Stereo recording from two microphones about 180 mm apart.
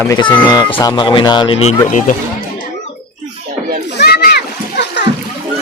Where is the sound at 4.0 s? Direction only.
60° left (ahead or behind).